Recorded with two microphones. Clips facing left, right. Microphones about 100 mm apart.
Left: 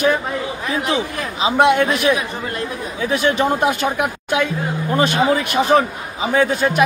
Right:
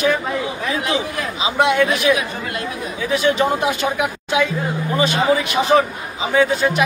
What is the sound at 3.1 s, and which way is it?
Speech, 50° left (ahead or behind).